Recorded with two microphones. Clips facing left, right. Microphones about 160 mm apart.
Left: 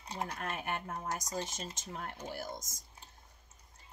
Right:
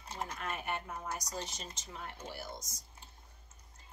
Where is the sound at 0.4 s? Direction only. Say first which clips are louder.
Left 1 dB; 50° left (ahead or behind).